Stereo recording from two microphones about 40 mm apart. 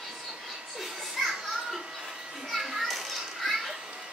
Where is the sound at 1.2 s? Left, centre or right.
Centre.